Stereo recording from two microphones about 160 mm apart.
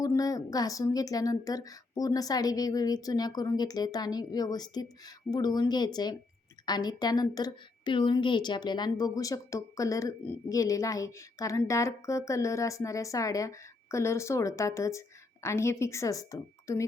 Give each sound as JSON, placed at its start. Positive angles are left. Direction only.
{"t": 0.0, "sound": "a woman's voice", "side_deg": 20}